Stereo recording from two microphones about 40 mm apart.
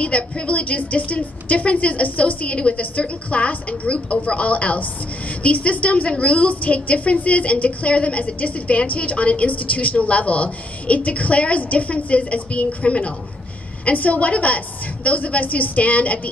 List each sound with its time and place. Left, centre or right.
0.0 s a woman's voice: left